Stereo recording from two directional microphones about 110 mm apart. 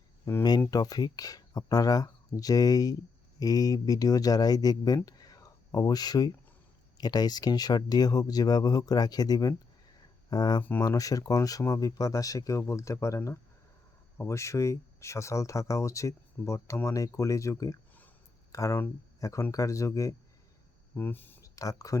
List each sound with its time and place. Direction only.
0.3 s speech: 35° left (ahead or behind)
5.0 s a sound: 35° left (ahead or behind)
7.0 s speech: 35° left (ahead or behind)
10.6 s speech: 15° left (ahead or behind)
10.8 s speech: 35° left (ahead or behind)
20.9 s speech: 15° left (ahead or behind)
21.4 s speech: 30° left (ahead or behind)